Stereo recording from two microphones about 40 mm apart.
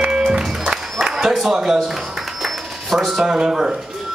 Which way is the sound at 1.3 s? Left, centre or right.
Centre.